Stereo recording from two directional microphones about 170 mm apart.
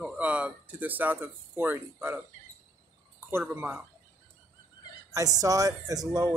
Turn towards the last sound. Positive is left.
turn(degrees=-20)  # may be behind; listen again after turning